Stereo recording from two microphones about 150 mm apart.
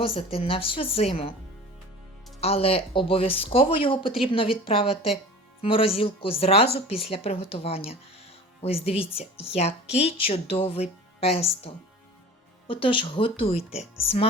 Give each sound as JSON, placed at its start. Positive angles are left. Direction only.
{"t": 0.0, "sound": "speech", "side_deg": 40}
{"t": 2.4, "sound": "speech", "side_deg": 40}